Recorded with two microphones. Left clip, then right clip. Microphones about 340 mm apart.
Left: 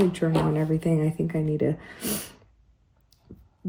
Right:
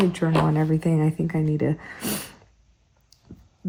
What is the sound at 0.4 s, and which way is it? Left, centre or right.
Speech, right.